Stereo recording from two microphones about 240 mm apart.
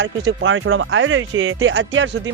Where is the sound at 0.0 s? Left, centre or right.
Right.